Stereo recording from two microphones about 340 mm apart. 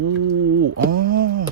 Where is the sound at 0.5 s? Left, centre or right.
Right.